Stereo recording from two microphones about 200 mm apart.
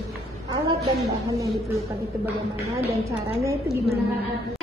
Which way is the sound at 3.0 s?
15° right (ahead or behind).